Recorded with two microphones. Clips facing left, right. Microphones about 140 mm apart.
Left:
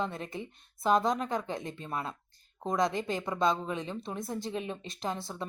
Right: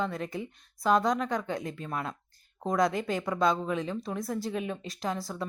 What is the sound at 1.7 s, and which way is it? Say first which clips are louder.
A woman's voice: right 2 dB; 30° left (ahead or behind).